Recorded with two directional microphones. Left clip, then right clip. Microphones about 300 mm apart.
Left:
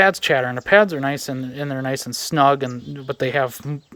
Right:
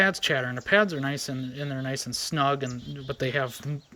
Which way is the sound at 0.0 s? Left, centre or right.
Centre.